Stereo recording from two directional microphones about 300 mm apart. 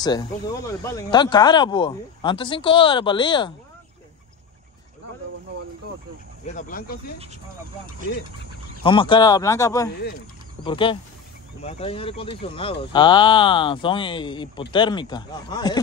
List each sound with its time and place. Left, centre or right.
0.0 s speech: centre
6.4 s speech: left
8.8 s speech: centre